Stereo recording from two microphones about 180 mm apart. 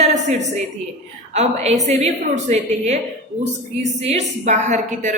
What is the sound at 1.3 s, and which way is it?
A woman's voice, 40° right (ahead or behind).